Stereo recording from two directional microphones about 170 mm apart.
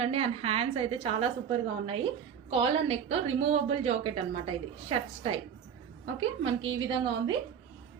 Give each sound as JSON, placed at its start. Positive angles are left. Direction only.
{"t": 0.0, "sound": "a woman's voice", "side_deg": -35}